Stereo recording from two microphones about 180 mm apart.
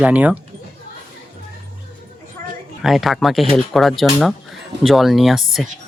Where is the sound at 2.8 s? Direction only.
Centre (ahead or behind).